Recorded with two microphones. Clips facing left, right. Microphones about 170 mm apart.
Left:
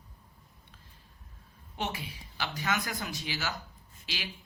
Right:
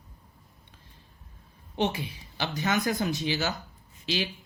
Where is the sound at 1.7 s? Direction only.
25° right (ahead or behind).